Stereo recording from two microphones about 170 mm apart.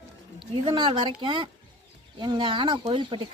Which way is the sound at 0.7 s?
25° right (ahead or behind).